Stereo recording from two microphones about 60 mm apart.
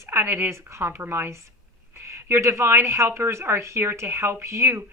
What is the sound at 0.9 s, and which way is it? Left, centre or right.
Speech, right.